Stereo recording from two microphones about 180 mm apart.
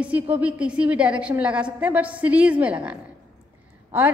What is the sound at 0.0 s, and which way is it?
A woman's voice, 10° right (ahead or behind).